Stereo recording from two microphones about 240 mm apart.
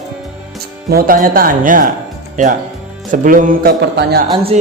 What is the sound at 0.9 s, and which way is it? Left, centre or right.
Speech, right.